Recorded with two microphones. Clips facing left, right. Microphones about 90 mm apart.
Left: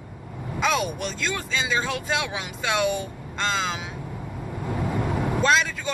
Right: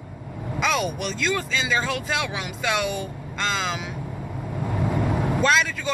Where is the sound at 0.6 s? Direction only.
30° left (ahead or behind).